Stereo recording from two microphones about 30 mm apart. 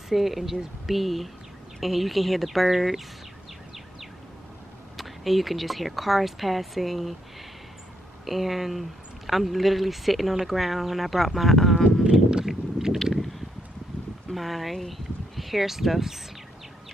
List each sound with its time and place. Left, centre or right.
0.1 s speech: centre
4.9 s speech: centre
8.3 s speech: centre
12.1 s clip-clop: right
13.0 s a sound: centre
14.3 s speech: centre